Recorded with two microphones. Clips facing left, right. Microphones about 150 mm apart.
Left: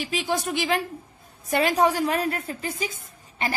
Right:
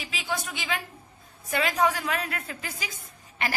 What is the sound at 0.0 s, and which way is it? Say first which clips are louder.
A woman's voice: left 7 dB; 35° left (ahead or behind).